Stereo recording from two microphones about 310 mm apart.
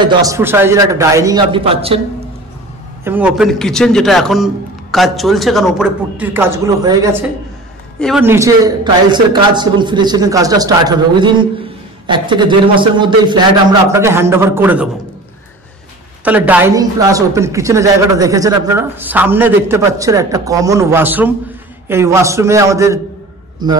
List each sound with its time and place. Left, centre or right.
0.0 s speech: centre
3.0 s a man's voice: centre
16.3 s speech: centre